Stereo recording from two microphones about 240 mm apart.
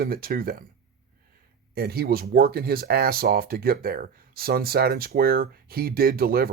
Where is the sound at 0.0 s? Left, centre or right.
Right.